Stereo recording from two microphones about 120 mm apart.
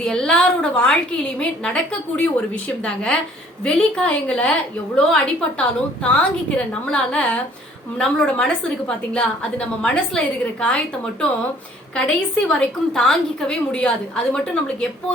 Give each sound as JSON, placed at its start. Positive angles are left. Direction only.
{"t": 0.0, "sound": "a woman's voice", "side_deg": 5}